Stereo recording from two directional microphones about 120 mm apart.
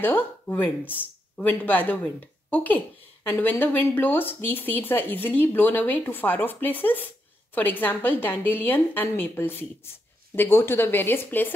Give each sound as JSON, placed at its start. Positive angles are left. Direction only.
{"t": 0.0, "sound": "speech", "side_deg": 15}